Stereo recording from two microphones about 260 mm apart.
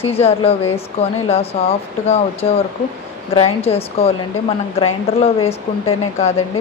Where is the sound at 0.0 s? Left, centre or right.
Left.